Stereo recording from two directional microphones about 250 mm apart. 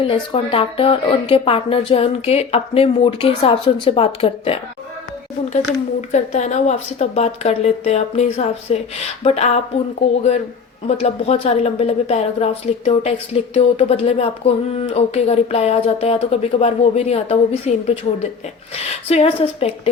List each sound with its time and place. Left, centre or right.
0.0 s a woman's voice: left
6.0 s a woman's voice: left
10.8 s a woman's voice: left